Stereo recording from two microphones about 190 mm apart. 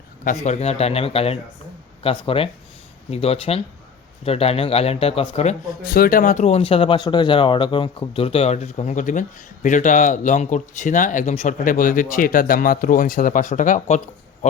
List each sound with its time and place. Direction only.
0.3 s speech: 40° left (ahead or behind)
5.9 s speech: 50° left (ahead or behind)